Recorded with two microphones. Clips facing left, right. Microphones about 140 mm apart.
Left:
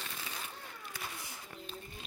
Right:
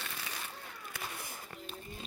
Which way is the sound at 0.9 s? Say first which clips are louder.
Right 3 dB; 55° right (ahead or behind).